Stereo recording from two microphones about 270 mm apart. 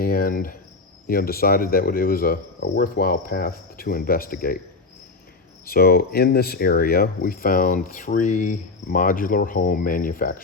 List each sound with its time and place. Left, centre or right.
0.0 s speech: left
5.6 s speech: left